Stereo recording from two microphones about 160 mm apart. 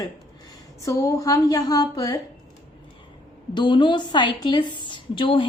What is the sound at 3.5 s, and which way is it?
A woman's voice, 30° left (ahead or behind).